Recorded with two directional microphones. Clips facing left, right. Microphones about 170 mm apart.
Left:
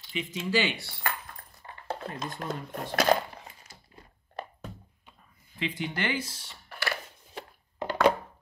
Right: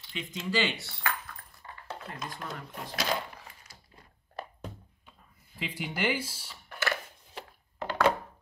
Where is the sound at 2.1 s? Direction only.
25° left (ahead or behind).